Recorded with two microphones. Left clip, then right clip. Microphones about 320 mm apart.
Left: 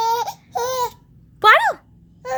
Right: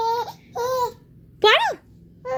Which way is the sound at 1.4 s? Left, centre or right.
Left.